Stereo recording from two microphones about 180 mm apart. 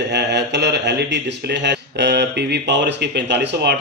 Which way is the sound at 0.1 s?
70° right (ahead or behind).